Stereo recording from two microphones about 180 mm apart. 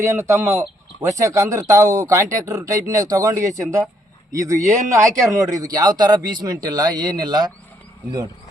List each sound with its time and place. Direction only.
0.0 s speech: 15° right (ahead or behind)